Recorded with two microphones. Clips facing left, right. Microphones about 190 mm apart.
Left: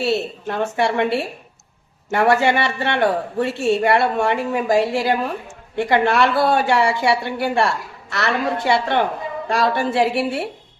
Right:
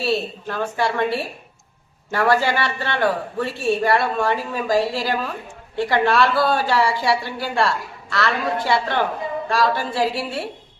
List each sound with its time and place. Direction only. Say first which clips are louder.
0.0 s speech: left 2 dB; 20° left (ahead or behind)